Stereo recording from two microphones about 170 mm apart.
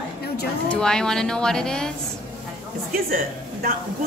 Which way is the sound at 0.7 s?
5° left (ahead or behind).